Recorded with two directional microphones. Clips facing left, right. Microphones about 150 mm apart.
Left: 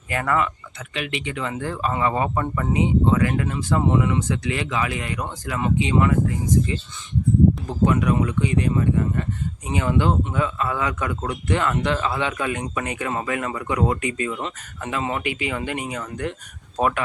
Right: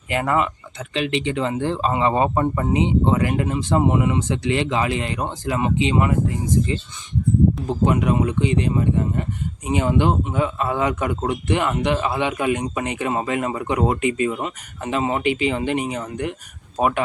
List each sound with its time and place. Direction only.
0.1 s speech: 20° right (ahead or behind)